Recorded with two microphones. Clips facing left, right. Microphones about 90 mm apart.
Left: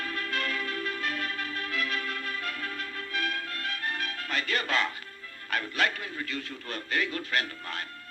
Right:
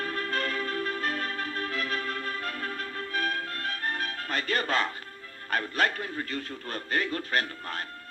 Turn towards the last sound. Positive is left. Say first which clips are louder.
# right 1 dB
turn(degrees=-35)  # may be behind; listen again after turning